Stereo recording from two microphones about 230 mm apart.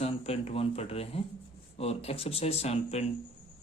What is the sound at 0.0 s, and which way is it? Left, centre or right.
Speech, left.